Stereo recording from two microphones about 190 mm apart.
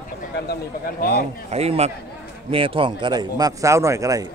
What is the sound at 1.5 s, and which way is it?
A man's voice, 35° right (ahead or behind).